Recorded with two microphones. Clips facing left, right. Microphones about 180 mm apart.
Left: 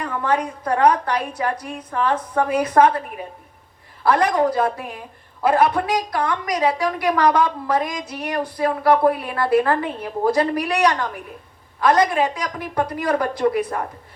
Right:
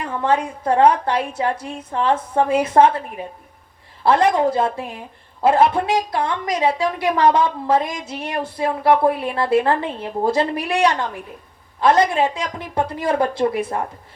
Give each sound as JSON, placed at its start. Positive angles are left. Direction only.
{"t": 0.0, "sound": "a woman's voice", "side_deg": -25}
{"t": 4.0, "sound": "a woman's voice", "side_deg": -25}